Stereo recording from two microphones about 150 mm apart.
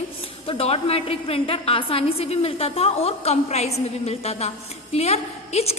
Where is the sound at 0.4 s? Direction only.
40° left (ahead or behind).